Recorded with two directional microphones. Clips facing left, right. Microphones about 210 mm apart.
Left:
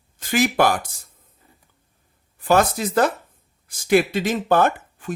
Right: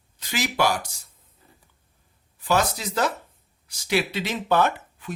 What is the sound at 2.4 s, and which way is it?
Speech, 50° left (ahead or behind).